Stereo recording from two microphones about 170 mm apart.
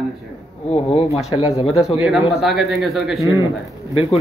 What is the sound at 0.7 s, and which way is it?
Speech, 35° left (ahead or behind).